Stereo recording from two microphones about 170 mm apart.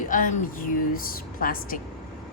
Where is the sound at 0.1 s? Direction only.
50° left (ahead or behind).